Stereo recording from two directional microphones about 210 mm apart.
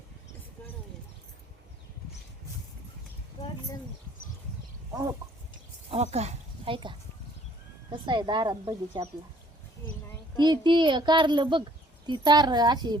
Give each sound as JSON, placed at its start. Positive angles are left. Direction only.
{"t": 5.9, "sound": "speech", "side_deg": -30}
{"t": 10.3, "sound": "speech", "side_deg": -20}